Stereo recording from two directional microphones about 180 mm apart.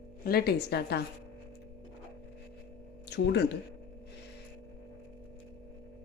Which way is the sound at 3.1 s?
70° left (ahead or behind).